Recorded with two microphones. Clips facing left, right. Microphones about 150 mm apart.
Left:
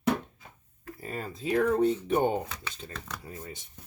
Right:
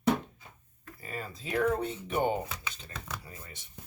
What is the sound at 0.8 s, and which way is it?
Speech, 45° left (ahead or behind).